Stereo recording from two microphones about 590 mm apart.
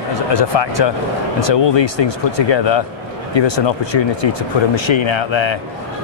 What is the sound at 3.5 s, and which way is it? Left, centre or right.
Speech, left.